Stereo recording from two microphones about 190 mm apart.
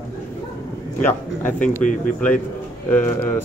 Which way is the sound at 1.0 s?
10° left (ahead or behind).